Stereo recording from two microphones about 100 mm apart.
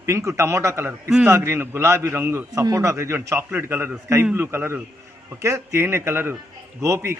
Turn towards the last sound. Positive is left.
turn(degrees=-30)  # may be behind; listen again after turning